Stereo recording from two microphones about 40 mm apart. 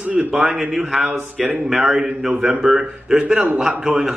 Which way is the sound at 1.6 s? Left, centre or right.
Centre.